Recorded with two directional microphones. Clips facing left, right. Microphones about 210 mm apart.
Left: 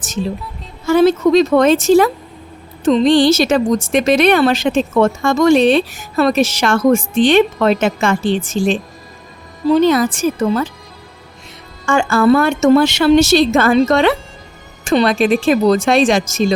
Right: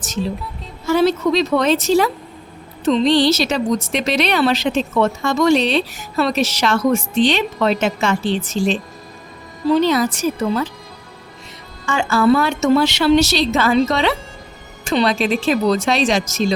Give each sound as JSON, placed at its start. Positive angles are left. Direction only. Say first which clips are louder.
{"t": 0.9, "sound": "speech", "louder": "left 4 dB", "side_deg": 50}
{"t": 9.8, "sound": "speech", "louder": "left 4 dB", "side_deg": 50}
{"t": 11.9, "sound": "speech", "louder": "left 3 dB", "side_deg": 50}